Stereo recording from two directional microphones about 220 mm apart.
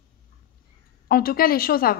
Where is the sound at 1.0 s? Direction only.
45° left (ahead or behind).